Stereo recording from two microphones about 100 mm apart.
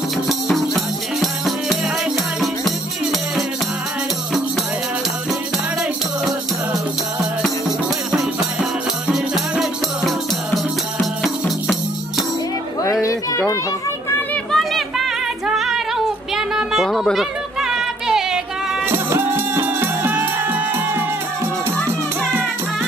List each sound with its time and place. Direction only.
0.3 s music: centre (ahead or behind)
8.1 s music: 5° right (ahead or behind)
14.3 s singing: 5° left (ahead or behind)
16.3 s a sound: 5° right (ahead or behind)
18.9 s music: 25° right (ahead or behind)